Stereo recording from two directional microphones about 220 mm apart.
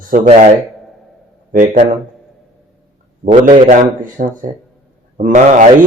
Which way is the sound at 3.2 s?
30° right (ahead or behind).